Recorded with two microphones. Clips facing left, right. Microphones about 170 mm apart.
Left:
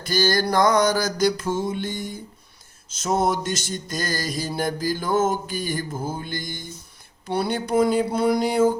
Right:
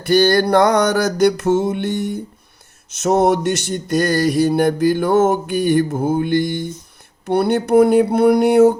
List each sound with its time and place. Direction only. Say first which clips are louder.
0.0 s mantra: right 8 dB; 60° right (ahead or behind)